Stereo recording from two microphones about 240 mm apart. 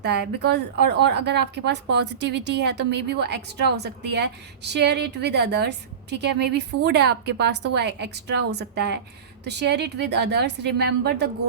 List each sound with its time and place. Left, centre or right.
0.0 s a woman's voice: right